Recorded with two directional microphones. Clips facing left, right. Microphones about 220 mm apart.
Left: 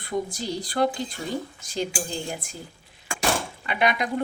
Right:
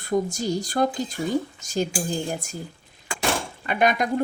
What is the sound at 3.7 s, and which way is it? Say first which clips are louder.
Speech: right 3 dB; 45° right (ahead or behind).